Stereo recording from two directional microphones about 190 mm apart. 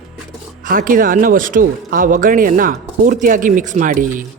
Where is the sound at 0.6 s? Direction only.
45° right (ahead or behind).